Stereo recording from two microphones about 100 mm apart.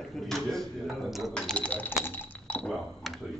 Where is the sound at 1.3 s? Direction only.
15° left (ahead or behind).